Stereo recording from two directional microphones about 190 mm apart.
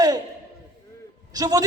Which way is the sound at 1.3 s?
20° right (ahead or behind).